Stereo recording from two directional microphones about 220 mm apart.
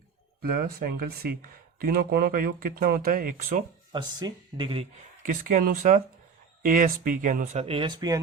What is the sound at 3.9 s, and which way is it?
Speech, 20° right (ahead or behind).